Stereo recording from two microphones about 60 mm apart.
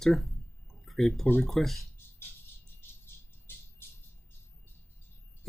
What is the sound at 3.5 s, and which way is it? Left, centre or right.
Music, left.